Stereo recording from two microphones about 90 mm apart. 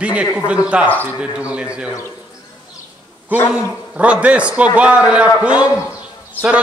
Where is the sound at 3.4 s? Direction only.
10° right (ahead or behind).